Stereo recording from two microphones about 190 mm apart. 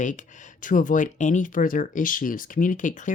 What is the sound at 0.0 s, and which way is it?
Speech, 40° left (ahead or behind).